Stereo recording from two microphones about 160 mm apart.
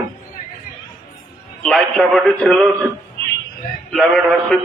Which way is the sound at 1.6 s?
5° left (ahead or behind).